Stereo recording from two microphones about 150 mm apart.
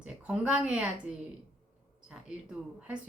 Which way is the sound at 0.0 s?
10° right (ahead or behind).